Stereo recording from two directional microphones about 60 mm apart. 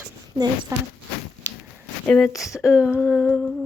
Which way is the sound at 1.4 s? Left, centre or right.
Right.